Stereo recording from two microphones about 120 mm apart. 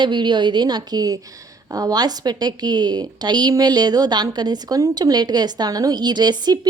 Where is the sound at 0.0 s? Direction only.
40° right (ahead or behind).